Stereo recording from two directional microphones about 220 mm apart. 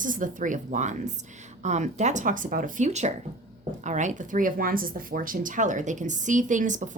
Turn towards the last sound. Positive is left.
turn(degrees=-35)  # may be behind; listen again after turning